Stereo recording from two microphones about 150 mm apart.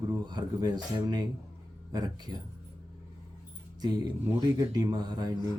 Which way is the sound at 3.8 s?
25° right (ahead or behind).